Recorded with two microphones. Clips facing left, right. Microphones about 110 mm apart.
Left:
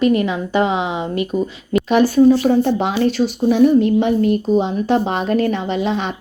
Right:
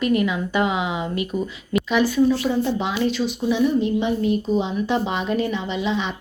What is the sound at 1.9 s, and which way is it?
Speech, 50° left (ahead or behind).